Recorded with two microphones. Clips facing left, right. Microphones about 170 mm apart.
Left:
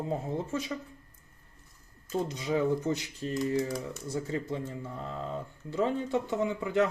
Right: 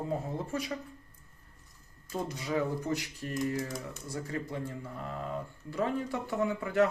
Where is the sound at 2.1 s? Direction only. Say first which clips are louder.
Left 3 dB; 20° left (ahead or behind).